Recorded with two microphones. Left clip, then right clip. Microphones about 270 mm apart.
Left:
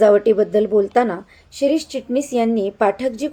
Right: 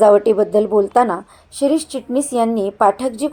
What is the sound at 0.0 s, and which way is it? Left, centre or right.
A woman's voice, centre.